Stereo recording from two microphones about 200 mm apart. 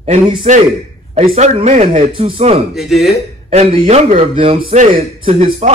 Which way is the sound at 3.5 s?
30° right (ahead or behind).